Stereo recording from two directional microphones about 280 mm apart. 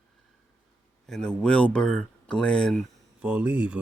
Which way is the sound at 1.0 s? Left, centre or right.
Centre.